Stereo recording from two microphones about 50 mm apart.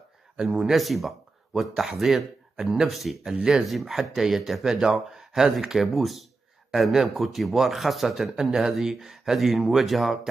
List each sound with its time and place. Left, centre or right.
0.4 s speech: centre
3.3 s speech: centre
3.6 s speech: centre